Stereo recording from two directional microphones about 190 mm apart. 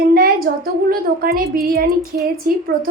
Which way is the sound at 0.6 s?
50° right (ahead or behind).